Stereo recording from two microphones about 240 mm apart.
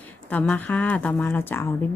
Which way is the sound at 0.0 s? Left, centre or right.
Centre.